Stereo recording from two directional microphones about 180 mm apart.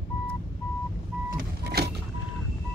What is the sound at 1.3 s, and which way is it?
Vehicle, 60° right (ahead or behind).